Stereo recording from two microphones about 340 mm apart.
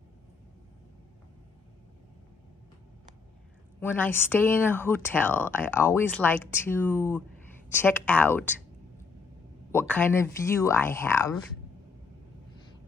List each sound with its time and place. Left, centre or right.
3.8 s a woman's voice: centre
9.7 s speech: centre